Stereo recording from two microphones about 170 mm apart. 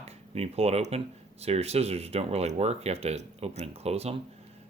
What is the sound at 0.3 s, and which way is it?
Speech, 35° right (ahead or behind).